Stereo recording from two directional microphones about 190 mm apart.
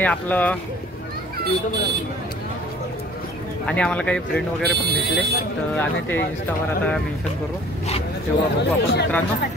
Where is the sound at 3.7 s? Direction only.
5° left (ahead or behind).